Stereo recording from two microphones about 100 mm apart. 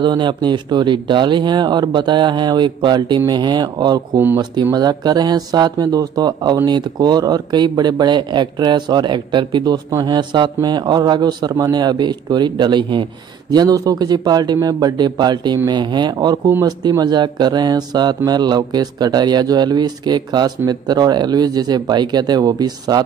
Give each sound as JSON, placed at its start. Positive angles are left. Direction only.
{"t": 0.0, "sound": "speech", "side_deg": -50}